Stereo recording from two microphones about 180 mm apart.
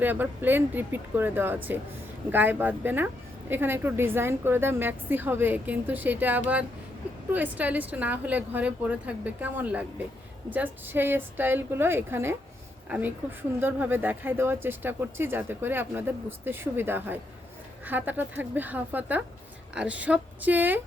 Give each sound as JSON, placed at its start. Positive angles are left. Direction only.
{"t": 0.0, "sound": "speech", "side_deg": -10}